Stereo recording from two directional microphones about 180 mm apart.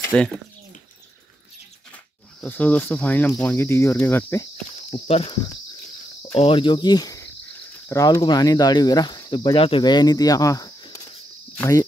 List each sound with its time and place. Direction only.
0.0 s bird: 5° left (ahead or behind)
2.4 s cricket: 10° left (ahead or behind)
4.9 s speech: 30° left (ahead or behind)
7.9 s cricket: 15° left (ahead or behind)
8.2 s speech: 20° left (ahead or behind)